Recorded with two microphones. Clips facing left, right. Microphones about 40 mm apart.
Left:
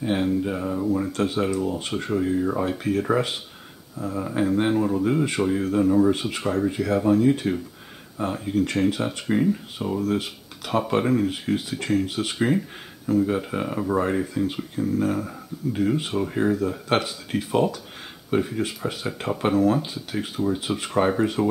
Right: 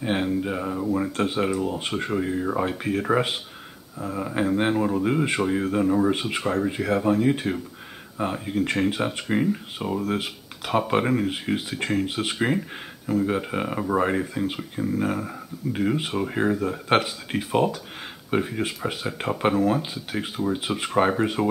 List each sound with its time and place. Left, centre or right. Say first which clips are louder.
0.0 s speech: left 1 dB; centre